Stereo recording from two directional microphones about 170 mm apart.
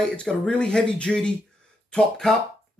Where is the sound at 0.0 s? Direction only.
5° left (ahead or behind).